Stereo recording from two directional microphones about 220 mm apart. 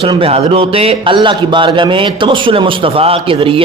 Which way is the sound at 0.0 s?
25° right (ahead or behind).